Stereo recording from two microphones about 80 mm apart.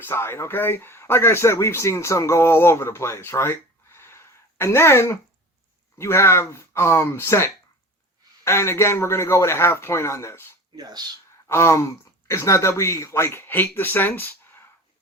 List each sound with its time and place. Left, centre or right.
0.0 s a man's voice: left
10.8 s speech: right
11.4 s speech: left